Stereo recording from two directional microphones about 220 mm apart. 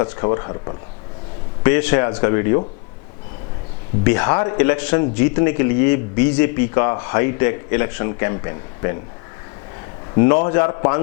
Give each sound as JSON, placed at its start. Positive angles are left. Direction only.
{"t": 0.0, "sound": "speech", "side_deg": 20}
{"t": 1.6, "sound": "a man's voice", "side_deg": 10}
{"t": 4.0, "sound": "a man's voice", "side_deg": 10}
{"t": 10.2, "sound": "a man's voice", "side_deg": 15}